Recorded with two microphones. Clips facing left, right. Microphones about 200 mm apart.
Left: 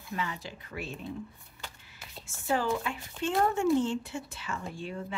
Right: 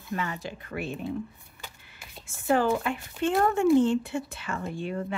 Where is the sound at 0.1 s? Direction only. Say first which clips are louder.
Right 4 dB; 50° right (ahead or behind).